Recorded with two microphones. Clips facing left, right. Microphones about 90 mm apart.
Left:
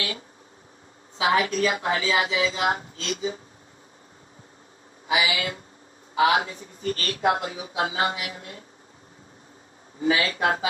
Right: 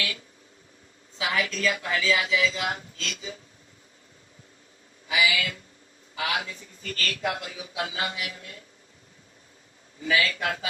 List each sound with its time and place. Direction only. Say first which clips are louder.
1.2 s a man's voice: left 5 dB; 35° left (ahead or behind)
5.0 s a man's voice: left 1 dB; 35° left (ahead or behind)
10.0 s a man's voice: left 3 dB; 35° left (ahead or behind)